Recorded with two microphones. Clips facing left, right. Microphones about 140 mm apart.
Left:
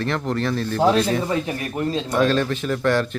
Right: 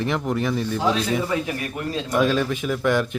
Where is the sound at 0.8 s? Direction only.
55° left (ahead or behind).